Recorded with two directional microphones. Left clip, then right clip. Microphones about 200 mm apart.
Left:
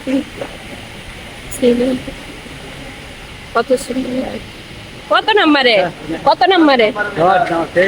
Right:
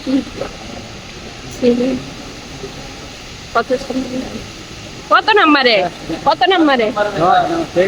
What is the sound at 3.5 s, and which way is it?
Speech, 10° left (ahead or behind).